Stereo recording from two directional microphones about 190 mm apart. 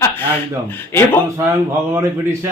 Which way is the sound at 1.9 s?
15° right (ahead or behind).